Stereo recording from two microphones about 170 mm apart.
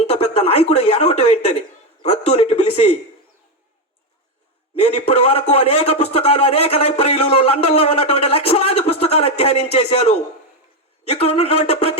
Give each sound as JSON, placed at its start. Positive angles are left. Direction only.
{"t": 0.0, "sound": "speech", "side_deg": 35}
{"t": 4.7, "sound": "speech", "side_deg": 35}